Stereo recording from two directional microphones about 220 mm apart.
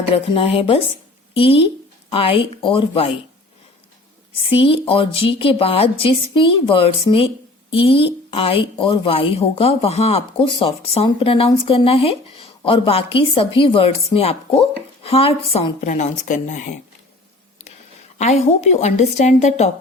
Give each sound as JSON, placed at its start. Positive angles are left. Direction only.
{"t": 0.1, "sound": "speech", "side_deg": 25}
{"t": 4.4, "sound": "speech", "side_deg": 25}
{"t": 18.2, "sound": "a woman's voice", "side_deg": 30}